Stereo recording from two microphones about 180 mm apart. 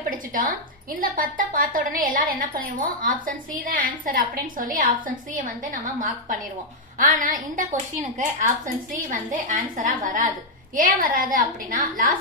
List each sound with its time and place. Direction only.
0.3 s a woman's voice: 50° right (ahead or behind)
10.8 s a woman's voice: 50° right (ahead or behind)